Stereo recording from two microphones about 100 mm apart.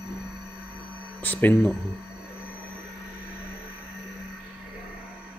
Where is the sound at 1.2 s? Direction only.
15° left (ahead or behind).